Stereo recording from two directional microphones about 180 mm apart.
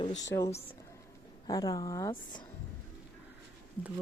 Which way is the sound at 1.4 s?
20° left (ahead or behind).